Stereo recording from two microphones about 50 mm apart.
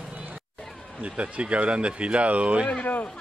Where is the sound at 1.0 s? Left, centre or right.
Right.